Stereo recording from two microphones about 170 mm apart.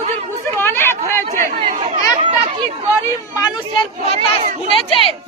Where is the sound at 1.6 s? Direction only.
45° right (ahead or behind).